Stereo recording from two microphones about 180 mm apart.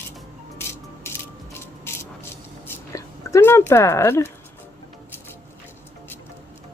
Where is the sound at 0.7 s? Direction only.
15° left (ahead or behind).